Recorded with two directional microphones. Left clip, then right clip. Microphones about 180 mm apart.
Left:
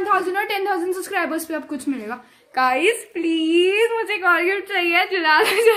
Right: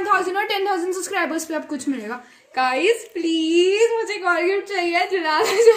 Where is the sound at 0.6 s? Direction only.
Centre (ahead or behind).